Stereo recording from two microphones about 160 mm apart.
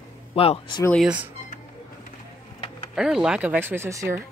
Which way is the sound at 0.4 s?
30° left (ahead or behind).